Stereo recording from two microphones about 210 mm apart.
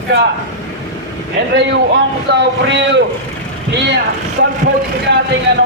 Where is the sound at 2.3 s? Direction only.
55° right (ahead or behind).